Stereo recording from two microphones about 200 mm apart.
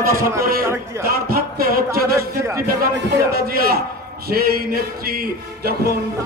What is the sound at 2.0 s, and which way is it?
Speech, 15° right (ahead or behind).